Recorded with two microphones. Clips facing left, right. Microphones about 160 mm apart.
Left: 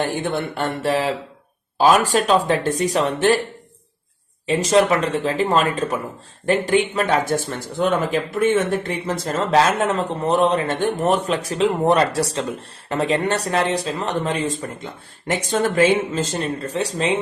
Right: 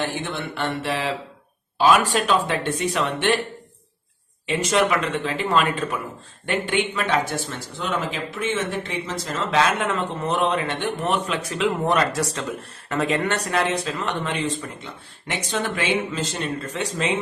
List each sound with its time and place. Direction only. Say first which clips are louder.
0.0 s speech: left 5 dB; 50° left (ahead or behind)
4.4 s speech: left 4 dB; 35° left (ahead or behind)